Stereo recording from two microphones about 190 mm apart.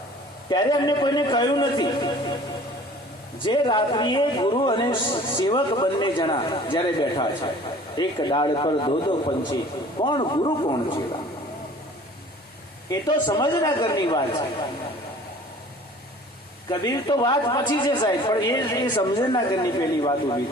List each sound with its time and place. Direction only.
0.5 s a man's voice: 20° left (ahead or behind)
3.4 s a man's voice: 25° left (ahead or behind)
12.9 s a man's voice: 20° left (ahead or behind)
16.6 s a man's voice: 20° left (ahead or behind)